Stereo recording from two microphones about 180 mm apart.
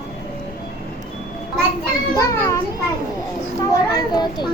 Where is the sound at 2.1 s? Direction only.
20° left (ahead or behind).